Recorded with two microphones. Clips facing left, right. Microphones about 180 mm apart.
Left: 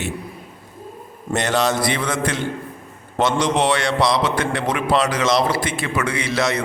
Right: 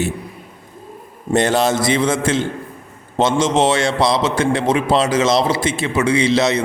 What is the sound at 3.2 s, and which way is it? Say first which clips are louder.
A man's voice: right 3 dB; 25° right (ahead or behind).